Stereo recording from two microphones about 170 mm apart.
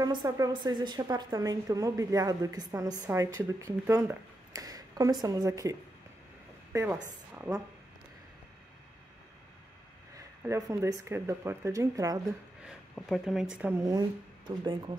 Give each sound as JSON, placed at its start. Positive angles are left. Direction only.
{"t": 0.0, "sound": "a woman's voice", "side_deg": -25}
{"t": 10.1, "sound": "speech", "side_deg": -15}
{"t": 12.6, "sound": "speech", "side_deg": 0}
{"t": 13.8, "sound": "a woman's voice", "side_deg": -25}